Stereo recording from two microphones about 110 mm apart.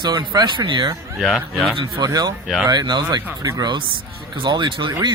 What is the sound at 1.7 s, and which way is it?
Speech, 45° right (ahead or behind).